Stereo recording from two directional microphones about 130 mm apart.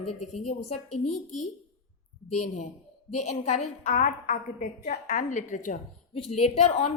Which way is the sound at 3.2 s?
60° left (ahead or behind).